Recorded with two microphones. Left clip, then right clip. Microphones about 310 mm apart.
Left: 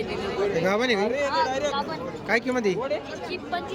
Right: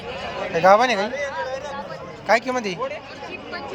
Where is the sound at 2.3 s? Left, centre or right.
Centre.